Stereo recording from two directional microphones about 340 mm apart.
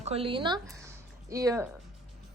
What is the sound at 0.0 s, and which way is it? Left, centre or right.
Speech, centre.